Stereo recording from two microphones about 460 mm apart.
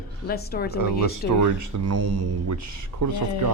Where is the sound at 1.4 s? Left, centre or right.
Right.